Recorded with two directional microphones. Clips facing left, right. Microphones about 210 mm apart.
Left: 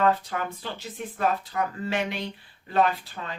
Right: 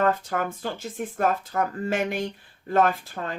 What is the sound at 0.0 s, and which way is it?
Speech, 45° right (ahead or behind).